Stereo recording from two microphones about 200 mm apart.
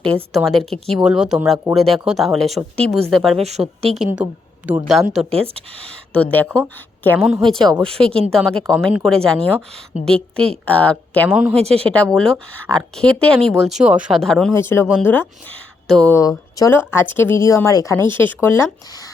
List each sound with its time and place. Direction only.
0.4 s speech: centre (ahead or behind)
3.3 s speech: 30° right (ahead or behind)
3.9 s speech: 5° right (ahead or behind)
5.3 s speech: 30° right (ahead or behind)
6.1 s speech: 5° left (ahead or behind)
7.1 s speech: 5° right (ahead or behind)
11.3 s speech: 5° right (ahead or behind)
11.5 s speech: 30° right (ahead or behind)
11.9 s speech: 5° left (ahead or behind)